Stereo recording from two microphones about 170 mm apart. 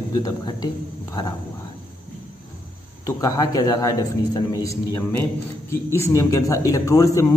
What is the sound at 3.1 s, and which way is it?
A man's voice, 20° left (ahead or behind).